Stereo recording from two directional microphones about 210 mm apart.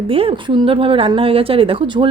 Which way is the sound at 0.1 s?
25° right (ahead or behind).